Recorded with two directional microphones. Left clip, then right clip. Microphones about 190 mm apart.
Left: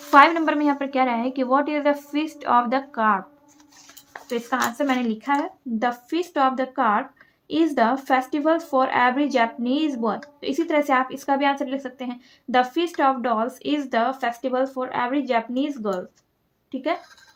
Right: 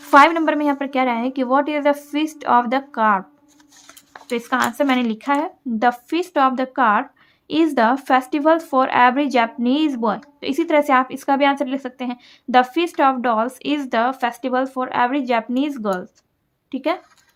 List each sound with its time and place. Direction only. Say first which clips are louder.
0.1 s a woman's voice: right 3 dB; 30° right (ahead or behind)